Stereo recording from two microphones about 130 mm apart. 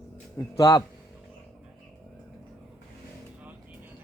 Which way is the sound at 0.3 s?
25° left (ahead or behind).